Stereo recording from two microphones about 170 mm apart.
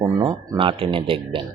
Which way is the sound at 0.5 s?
30° right (ahead or behind).